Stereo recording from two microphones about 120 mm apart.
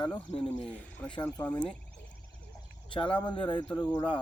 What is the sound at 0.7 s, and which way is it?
Speech, 10° left (ahead or behind).